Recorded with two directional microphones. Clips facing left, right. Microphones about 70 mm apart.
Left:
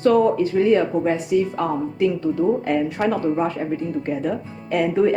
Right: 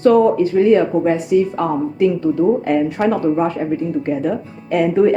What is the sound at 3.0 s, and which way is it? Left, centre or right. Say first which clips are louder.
Speech: right 4 dB; right.